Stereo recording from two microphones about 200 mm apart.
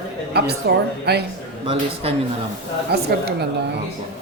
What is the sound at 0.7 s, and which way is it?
Speech, 55° right (ahead or behind).